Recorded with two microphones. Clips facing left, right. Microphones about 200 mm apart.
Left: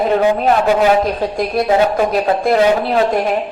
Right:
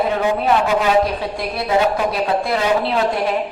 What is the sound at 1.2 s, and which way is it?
A woman's voice, 45° left (ahead or behind).